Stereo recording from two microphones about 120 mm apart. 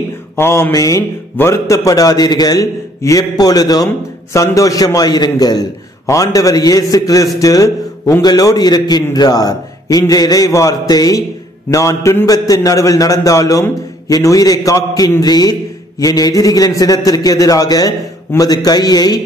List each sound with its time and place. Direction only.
0.4 s a man's voice: 20° left (ahead or behind)